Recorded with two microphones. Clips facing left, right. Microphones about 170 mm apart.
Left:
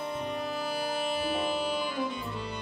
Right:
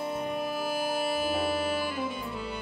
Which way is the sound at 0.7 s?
5° right (ahead or behind).